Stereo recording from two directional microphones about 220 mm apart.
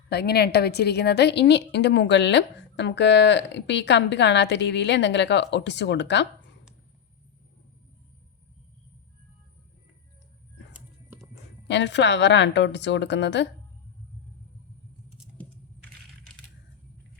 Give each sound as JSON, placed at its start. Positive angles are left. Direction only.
{"t": 0.1, "sound": "a woman's voice", "side_deg": 45}
{"t": 10.7, "sound": "music", "side_deg": -5}
{"t": 11.7, "sound": "a woman's voice", "side_deg": 50}
{"t": 15.2, "sound": "coin", "side_deg": 5}